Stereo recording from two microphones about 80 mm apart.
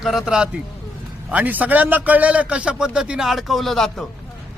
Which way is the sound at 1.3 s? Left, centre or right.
Right.